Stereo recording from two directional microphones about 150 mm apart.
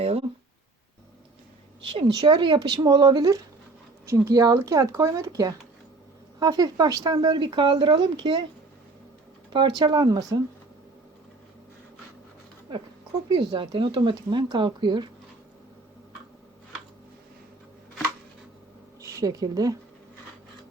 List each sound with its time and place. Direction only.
0.0 s a sound: 40° right (ahead or behind)
1.8 s speech: 35° right (ahead or behind)
9.5 s speech: 30° right (ahead or behind)
13.3 s speech: 35° right (ahead or behind)
19.0 s speech: 20° right (ahead or behind)